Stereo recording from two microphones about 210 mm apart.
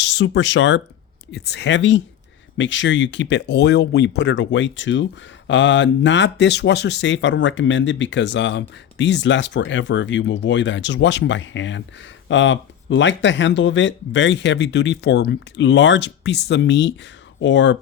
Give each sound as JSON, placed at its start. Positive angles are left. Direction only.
{"t": 0.0, "sound": "speech", "side_deg": 60}